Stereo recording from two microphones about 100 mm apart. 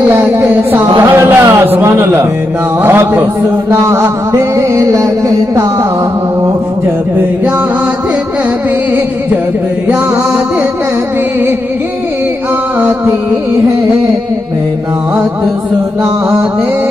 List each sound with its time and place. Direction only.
0.1 s a sound: 25° right (ahead or behind)
1.8 s a man's voice: 25° right (ahead or behind)
3.7 s mantra: 30° right (ahead or behind)